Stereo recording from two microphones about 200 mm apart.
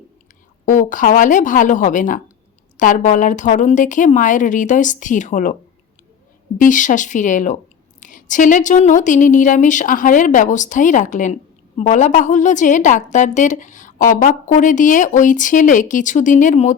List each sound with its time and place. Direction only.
0.6 s a woman's voice: 40° left (ahead or behind)
6.6 s a woman's voice: 40° left (ahead or behind)